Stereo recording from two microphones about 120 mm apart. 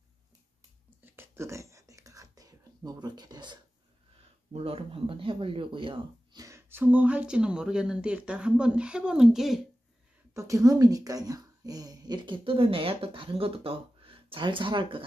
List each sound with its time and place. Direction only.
0.8 s whispering: 20° right (ahead or behind); by 3.5 s 35° right (ahead or behind)
4.5 s speech: 55° right (ahead or behind)
6.3 s a sound: 25° right (ahead or behind)
6.8 s speech: 15° right (ahead or behind)
10.3 s a woman's voice: 25° right (ahead or behind); by 15.0 s 45° right (ahead or behind)